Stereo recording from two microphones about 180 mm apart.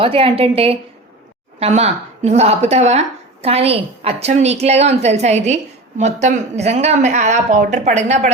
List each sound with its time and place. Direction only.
0.0 s a woman's voice: 30° right (ahead or behind)